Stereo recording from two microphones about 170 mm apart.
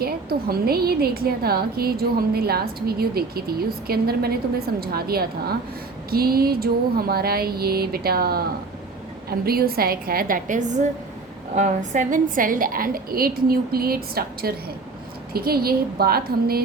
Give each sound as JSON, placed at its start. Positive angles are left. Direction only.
{"t": 0.0, "sound": "a woman's voice", "side_deg": -65}